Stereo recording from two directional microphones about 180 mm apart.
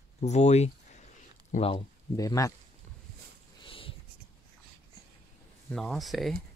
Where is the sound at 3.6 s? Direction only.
30° left (ahead or behind).